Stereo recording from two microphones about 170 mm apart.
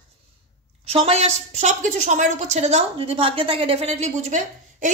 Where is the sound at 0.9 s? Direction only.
35° right (ahead or behind).